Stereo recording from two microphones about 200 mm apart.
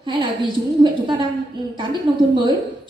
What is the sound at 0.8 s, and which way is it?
Speech, 25° right (ahead or behind).